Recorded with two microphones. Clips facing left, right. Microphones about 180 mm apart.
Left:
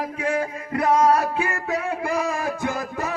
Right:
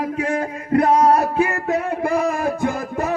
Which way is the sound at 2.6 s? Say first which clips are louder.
Right 4 dB; 55° right (ahead or behind).